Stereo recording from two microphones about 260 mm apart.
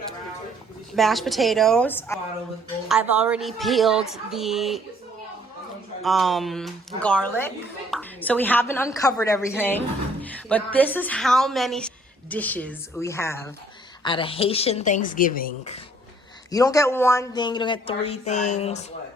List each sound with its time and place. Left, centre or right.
0.9 s a woman's voice: centre
2.9 s a woman's voice: centre
6.0 s a woman's voice: centre; by 15.8 s left
16.5 s a woman's voice: centre